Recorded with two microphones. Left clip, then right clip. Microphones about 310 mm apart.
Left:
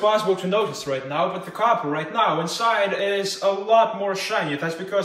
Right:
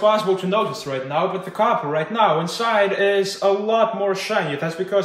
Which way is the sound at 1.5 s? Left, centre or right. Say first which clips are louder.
Right 2 dB; right.